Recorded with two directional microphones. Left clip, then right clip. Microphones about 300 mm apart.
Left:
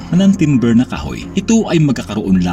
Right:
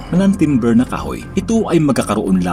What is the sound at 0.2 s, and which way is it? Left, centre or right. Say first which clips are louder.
Speech: left 1 dB; left.